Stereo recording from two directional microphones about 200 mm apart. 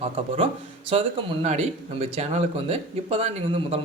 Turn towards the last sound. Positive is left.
turn(degrees=-30)  # may be behind; listen again after turning